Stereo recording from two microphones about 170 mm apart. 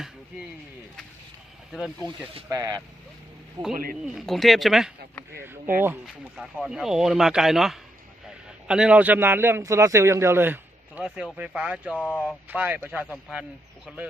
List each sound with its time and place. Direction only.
1.7 s speech: centre (ahead or behind)
2.5 s speech: 20° right (ahead or behind)
4.0 s speech: centre (ahead or behind)
5.3 s a man's voice: 15° right (ahead or behind)
6.3 s a man's voice: centre (ahead or behind)